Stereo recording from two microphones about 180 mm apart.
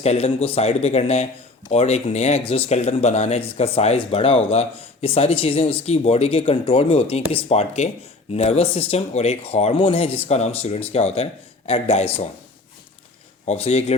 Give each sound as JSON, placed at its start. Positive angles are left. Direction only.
{"t": 0.0, "sound": "speech", "side_deg": 35}
{"t": 13.5, "sound": "speech", "side_deg": 35}